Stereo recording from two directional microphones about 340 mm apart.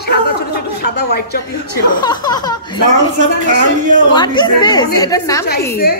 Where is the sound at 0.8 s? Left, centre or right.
Left.